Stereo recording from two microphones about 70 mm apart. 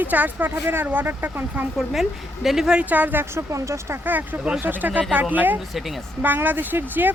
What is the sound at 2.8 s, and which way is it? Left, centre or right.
Speech, right.